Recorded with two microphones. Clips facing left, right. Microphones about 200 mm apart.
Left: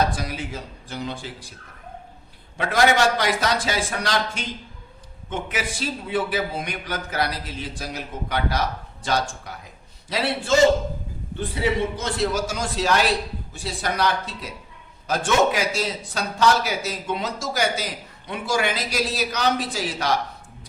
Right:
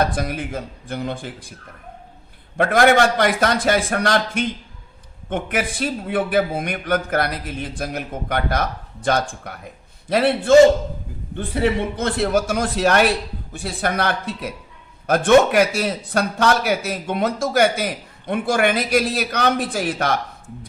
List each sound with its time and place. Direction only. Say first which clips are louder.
0.0 s a man's voice: right 3 dB; 55° right (ahead or behind)
2.6 s a man's voice: right 5 dB; 55° right (ahead or behind)